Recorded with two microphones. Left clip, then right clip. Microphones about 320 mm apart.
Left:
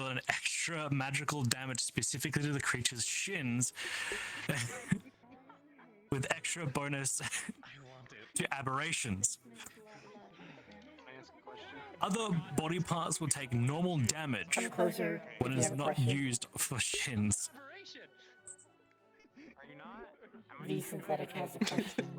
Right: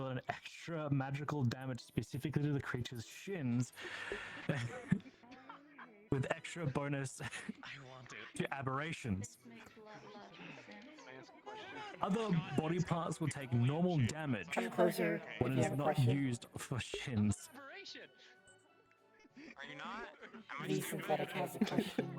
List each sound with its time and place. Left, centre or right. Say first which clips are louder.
0.0 s speech: left 7 dB; left
6.1 s speech: left 3 dB; left
7.6 s a sound: right 3 dB; centre
8.3 s speech: left 4 dB; left
10.4 s music: right 2 dB; centre
11.6 s a sound: right 1 dB; centre
11.9 s speech: left 3 dB; left
12.3 s speech: even; centre
12.5 s speech: left 3 dB; left
14.7 s speech: even; centre
15.4 s speech: left 3 dB; left
17.6 s music: even; centre
19.5 s a sound: right 6 dB; right
20.7 s speech: even; centre